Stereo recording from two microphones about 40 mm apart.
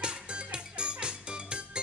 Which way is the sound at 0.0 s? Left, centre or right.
Right.